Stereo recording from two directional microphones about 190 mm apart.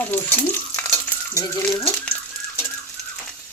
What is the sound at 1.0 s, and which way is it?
Stir, 15° left (ahead or behind).